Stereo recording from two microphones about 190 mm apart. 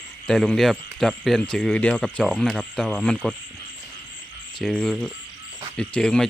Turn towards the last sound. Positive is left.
turn(degrees=5)  # may be behind; listen again after turning